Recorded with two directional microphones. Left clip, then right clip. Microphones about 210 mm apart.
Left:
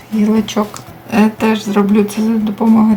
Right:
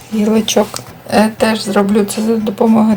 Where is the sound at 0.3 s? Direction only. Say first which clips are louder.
Right 5 dB; 30° right (ahead or behind).